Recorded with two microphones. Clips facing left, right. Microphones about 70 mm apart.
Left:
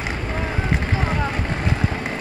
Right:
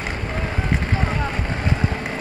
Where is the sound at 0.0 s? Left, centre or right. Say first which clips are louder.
Left 1 dB; centre.